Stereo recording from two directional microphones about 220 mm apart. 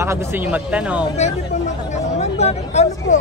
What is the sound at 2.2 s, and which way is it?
Speech, 30° left (ahead or behind).